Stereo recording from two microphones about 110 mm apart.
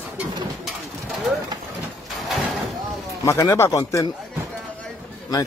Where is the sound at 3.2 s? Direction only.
30° left (ahead or behind).